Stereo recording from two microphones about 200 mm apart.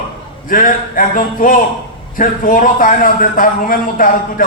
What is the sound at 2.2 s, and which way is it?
A man's voice, 40° left (ahead or behind).